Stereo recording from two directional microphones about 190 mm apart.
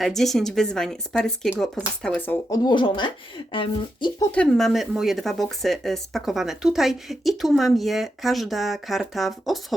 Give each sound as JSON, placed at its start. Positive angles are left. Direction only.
{"t": 0.0, "sound": "speech", "side_deg": 0}
{"t": 2.6, "sound": "speech", "side_deg": 25}
{"t": 4.3, "sound": "speech", "side_deg": 5}